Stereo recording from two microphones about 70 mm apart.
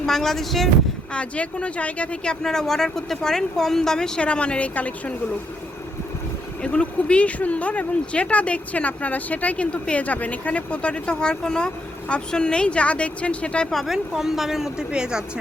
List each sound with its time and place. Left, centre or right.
0.0 s speech: centre
1.1 s speech: centre
6.6 s speech: centre
13.7 s speech: centre